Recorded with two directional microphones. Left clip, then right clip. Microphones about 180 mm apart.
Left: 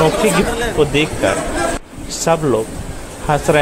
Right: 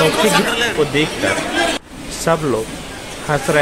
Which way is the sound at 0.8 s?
5° left (ahead or behind).